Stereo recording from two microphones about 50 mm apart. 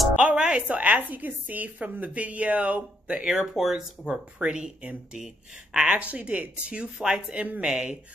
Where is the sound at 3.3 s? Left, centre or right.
Centre.